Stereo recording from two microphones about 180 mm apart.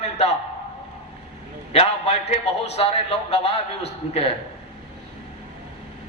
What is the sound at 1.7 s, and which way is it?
A man's voice, 35° left (ahead or behind).